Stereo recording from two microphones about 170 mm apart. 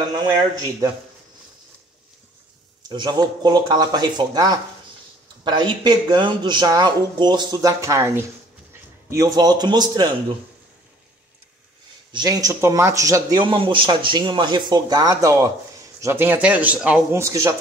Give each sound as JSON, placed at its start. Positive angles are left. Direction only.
{"t": 0.1, "sound": "speech", "side_deg": -20}
{"t": 2.9, "sound": "speech", "side_deg": -25}
{"t": 12.1, "sound": "speech", "side_deg": -25}